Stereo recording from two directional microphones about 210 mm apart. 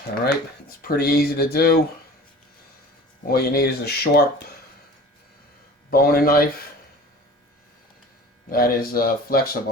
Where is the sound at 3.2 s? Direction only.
50° left (ahead or behind).